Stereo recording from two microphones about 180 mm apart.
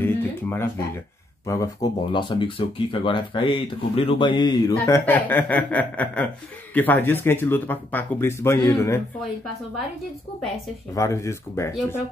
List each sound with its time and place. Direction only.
0.0 s speech: 10° left (ahead or behind)
11.0 s speech: 15° left (ahead or behind)